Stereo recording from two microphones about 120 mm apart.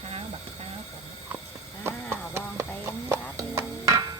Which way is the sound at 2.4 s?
20° right (ahead or behind).